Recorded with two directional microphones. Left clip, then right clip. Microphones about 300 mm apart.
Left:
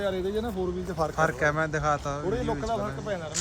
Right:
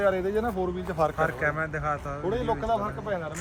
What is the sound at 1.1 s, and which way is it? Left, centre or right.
A man's voice, centre.